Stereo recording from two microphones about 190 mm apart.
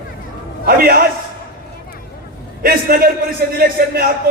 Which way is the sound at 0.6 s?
50° right (ahead or behind).